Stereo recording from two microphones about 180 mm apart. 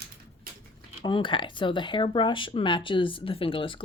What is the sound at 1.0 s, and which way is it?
Speech, 25° left (ahead or behind).